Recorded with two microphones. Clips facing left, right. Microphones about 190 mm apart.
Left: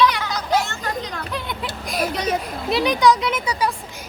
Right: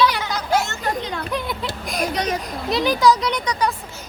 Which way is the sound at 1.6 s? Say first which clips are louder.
Even; 5° left (ahead or behind).